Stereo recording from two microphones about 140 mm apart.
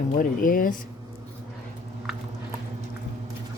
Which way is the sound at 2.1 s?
Centre (ahead or behind).